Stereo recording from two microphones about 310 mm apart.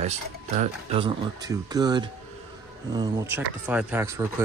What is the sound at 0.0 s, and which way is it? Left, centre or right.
Speech, right.